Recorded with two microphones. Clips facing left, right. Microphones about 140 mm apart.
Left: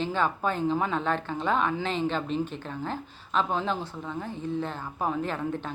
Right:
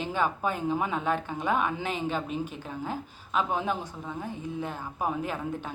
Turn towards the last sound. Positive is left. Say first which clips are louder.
# left 2 dB
turn(degrees=-10)  # may be behind; listen again after turning